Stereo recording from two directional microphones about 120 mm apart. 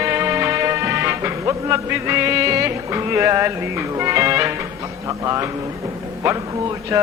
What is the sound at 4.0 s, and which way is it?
Speech, 25° right (ahead or behind).